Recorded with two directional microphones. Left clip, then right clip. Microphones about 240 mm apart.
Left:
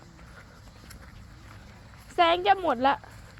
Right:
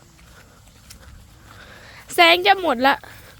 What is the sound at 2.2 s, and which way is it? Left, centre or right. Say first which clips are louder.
Speech: right 8 dB; right.